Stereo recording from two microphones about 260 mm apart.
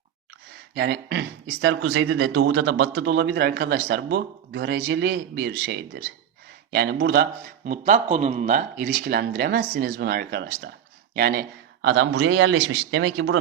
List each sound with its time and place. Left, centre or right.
0.7 s a man's voice: right